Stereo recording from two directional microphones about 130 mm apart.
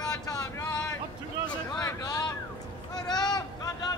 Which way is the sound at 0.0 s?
30° left (ahead or behind).